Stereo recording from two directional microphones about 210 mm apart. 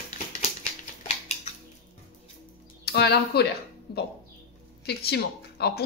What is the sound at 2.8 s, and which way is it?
Speech, 50° left (ahead or behind).